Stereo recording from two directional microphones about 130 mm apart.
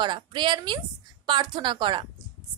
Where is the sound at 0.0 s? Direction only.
35° right (ahead or behind).